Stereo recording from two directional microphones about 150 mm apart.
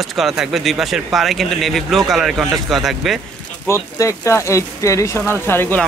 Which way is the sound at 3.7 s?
20° left (ahead or behind).